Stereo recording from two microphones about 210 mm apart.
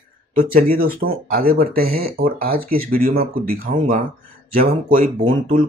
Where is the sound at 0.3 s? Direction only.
40° right (ahead or behind).